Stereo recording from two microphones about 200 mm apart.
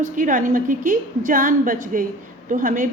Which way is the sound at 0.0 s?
40° right (ahead or behind).